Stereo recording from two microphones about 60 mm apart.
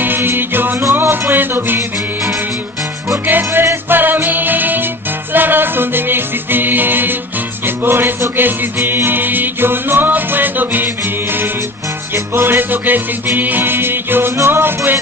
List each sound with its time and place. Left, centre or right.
0.0 s music: right
3.3 s music: right
12.4 s music: right